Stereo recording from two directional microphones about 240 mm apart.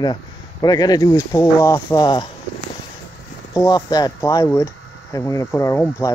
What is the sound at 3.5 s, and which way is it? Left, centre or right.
Speech, centre.